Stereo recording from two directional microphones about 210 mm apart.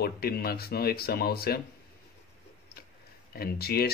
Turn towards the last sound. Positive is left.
turn(degrees=50)  # may be behind; listen again after turning